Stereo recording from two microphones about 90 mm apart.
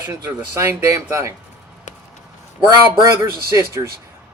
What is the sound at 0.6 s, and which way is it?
Speech, 35° right (ahead or behind).